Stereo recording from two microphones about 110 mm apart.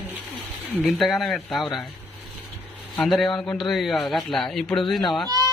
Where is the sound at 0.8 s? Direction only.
Centre (ahead or behind).